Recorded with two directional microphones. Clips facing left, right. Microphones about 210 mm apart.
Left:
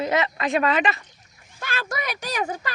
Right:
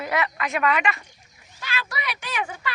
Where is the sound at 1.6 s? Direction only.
50° left (ahead or behind).